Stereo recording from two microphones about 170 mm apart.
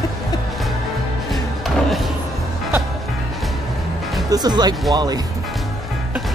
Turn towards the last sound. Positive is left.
turn(degrees=-25)  # may be behind; listen again after turning